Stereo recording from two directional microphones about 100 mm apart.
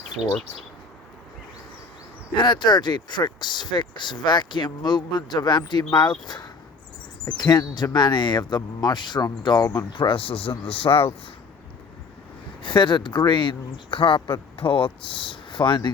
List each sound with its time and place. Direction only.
0.2 s speech: 10° right (ahead or behind)
2.3 s speech: 50° left (ahead or behind); by 11.1 s 65° left (ahead or behind)
12.6 s speech: 55° left (ahead or behind)